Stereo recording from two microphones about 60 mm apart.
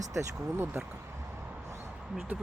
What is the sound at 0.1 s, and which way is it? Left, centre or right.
Speech, right.